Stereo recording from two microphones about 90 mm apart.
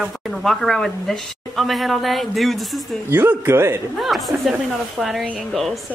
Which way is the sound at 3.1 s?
20° right (ahead or behind).